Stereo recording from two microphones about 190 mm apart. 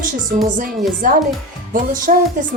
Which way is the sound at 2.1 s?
45° right (ahead or behind).